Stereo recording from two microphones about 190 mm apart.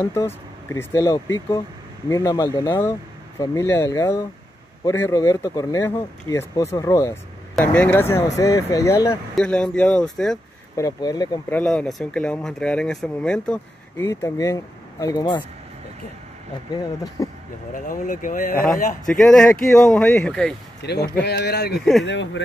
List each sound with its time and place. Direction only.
0.0 s speech: 15° left (ahead or behind)
9.3 s speech: 5° left (ahead or behind)
10.8 s speech: 20° left (ahead or behind)
11.5 s speech: 5° left (ahead or behind); by 15.4 s 20° left (ahead or behind)
16.7 s speech: 20° left (ahead or behind)
17.7 s speech: 45° left (ahead or behind)
19.0 s speech: centre (ahead or behind)
20.8 s speech: 60° left (ahead or behind)
22.0 s speech: 70° left (ahead or behind)